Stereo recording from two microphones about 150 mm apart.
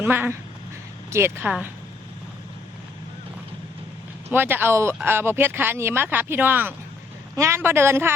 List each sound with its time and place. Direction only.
0.0 s speech: 15° right (ahead or behind)
4.3 s speech: 15° right (ahead or behind)